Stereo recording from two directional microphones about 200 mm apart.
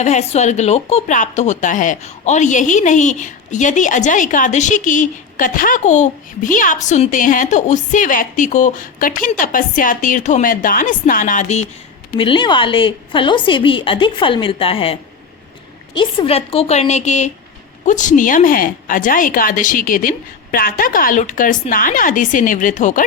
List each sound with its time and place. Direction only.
0.0 s a woman's voice: 35° left (ahead or behind)
16.0 s a woman's voice: 25° left (ahead or behind)